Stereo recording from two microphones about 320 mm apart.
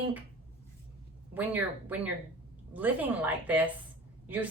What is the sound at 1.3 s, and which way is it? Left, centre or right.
A woman's voice, centre.